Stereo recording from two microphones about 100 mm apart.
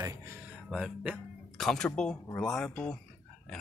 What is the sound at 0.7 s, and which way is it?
Speech, 5° right (ahead or behind).